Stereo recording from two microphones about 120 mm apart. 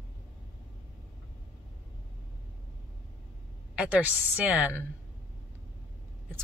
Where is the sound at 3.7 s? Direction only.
10° right (ahead or behind).